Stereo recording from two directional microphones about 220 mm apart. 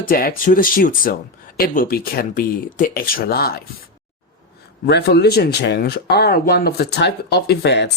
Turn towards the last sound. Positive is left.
turn(degrees=50)  # may be behind; listen again after turning